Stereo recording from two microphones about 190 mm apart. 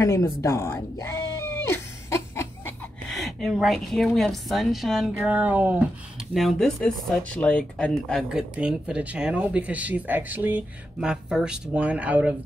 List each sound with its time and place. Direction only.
0.0 s speech: 15° left (ahead or behind)
1.7 s a sound: 15° left (ahead or behind)
3.1 s speech: centre (ahead or behind)